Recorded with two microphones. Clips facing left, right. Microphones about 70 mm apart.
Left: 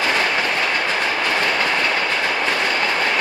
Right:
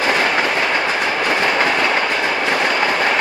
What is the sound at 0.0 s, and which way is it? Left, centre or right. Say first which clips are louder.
Train: right 3 dB; right.